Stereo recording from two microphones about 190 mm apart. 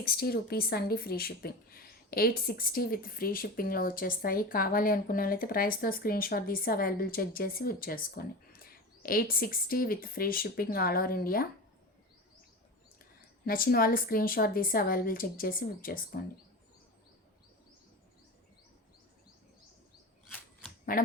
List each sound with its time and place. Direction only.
0.0 s speech: 55° left (ahead or behind)
13.0 s speech: 50° left (ahead or behind)
20.3 s a sound: 5° left (ahead or behind)